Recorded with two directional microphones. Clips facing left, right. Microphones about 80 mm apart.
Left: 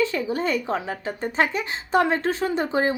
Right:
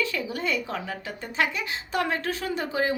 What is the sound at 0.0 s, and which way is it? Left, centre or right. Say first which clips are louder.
Speech: left 5 dB; left.